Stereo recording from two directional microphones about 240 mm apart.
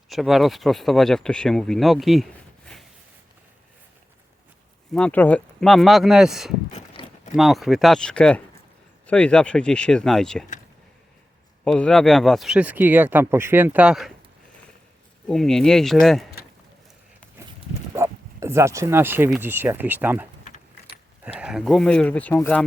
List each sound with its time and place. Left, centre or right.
0.1 s speech: centre
4.9 s speech: centre
7.0 s a sound: centre
7.3 s speech: centre
11.6 s speech: centre
15.3 s speech: centre
17.9 s speech: centre
21.3 s speech: centre